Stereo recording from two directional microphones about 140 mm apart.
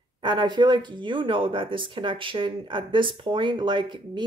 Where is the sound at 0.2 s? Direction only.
35° right (ahead or behind).